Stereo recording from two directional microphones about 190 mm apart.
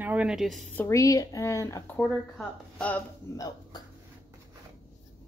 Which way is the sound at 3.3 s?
20° left (ahead or behind).